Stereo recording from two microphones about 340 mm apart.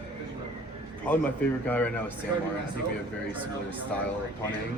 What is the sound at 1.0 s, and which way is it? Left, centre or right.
Speech, centre.